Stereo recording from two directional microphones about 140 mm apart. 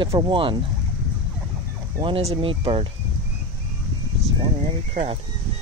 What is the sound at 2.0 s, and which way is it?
Speech, 45° right (ahead or behind).